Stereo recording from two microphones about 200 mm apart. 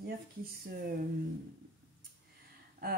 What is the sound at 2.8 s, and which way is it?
Speech, 50° right (ahead or behind).